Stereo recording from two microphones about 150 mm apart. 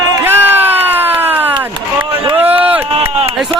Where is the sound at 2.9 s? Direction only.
40° right (ahead or behind).